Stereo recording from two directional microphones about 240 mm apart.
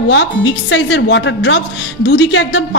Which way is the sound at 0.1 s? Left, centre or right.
Left.